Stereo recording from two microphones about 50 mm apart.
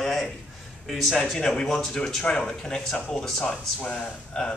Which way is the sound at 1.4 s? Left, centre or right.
Centre.